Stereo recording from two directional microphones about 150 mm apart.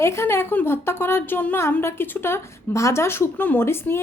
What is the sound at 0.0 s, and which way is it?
A woman's voice, 20° left (ahead or behind).